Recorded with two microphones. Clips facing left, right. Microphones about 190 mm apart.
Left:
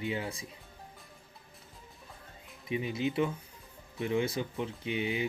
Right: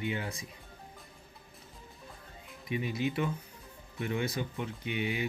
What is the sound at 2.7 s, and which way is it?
Speech, 30° left (ahead or behind).